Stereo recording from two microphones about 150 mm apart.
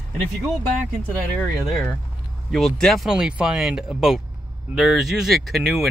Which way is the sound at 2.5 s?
Centre (ahead or behind).